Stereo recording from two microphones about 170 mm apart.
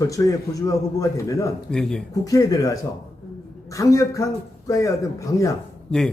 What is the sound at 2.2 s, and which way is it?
A man's voice, 20° left (ahead or behind).